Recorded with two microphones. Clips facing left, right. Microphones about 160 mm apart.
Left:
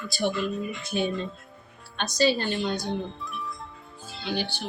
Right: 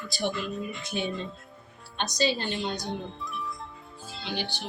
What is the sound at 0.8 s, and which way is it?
Speech, 20° right (ahead or behind).